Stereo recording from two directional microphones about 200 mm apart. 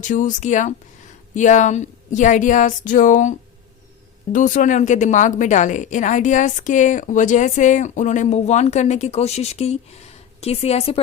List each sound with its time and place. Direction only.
0.0 s a woman's voice: 40° left (ahead or behind)